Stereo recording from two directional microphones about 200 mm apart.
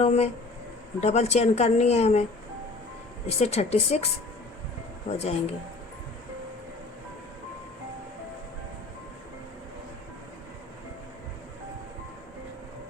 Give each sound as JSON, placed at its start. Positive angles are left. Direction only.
{"t": 0.0, "sound": "speech", "side_deg": 30}
{"t": 3.2, "sound": "speech", "side_deg": 30}